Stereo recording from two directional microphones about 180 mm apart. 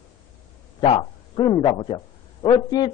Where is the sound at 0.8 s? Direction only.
30° left (ahead or behind).